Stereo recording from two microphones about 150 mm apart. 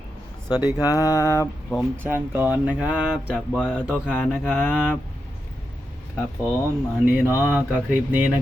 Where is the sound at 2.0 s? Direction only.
15° right (ahead or behind).